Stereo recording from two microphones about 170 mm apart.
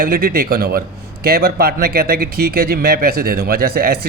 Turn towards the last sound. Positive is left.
turn(degrees=-65)  # may be behind; listen again after turning